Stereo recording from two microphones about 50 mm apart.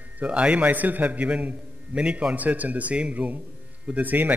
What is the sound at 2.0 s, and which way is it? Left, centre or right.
Speech, centre.